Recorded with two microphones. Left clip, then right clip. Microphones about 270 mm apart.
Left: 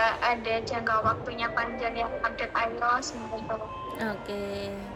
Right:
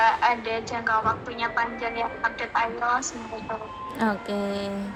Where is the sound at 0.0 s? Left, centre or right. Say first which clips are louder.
Right 5 dB; centre.